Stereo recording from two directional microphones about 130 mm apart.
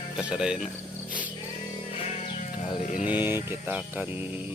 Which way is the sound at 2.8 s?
70° left (ahead or behind).